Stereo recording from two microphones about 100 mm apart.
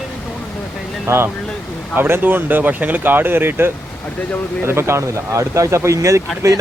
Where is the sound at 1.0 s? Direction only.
25° right (ahead or behind).